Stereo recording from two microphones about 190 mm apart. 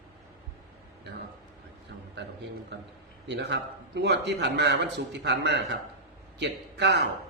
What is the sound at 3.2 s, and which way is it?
A man's voice, 65° right (ahead or behind).